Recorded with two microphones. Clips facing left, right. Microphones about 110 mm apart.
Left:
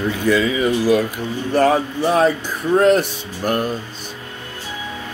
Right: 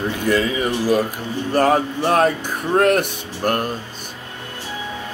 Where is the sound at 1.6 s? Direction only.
50° right (ahead or behind).